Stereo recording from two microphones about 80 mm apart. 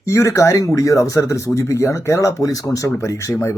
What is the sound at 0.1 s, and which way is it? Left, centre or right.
Speech, left.